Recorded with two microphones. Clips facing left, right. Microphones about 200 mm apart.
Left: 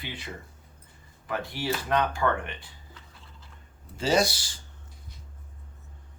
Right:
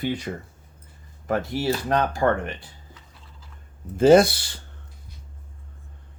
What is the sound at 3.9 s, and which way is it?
Speech, 55° right (ahead or behind).